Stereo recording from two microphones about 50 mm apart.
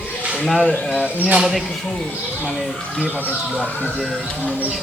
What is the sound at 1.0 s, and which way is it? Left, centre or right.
Speech, right.